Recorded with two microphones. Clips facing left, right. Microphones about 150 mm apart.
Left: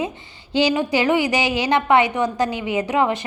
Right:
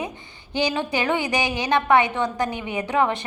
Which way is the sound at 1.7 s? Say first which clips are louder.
Left 1 dB; 20° left (ahead or behind).